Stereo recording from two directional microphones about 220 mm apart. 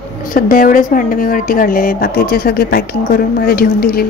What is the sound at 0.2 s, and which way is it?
Speech, 40° left (ahead or behind).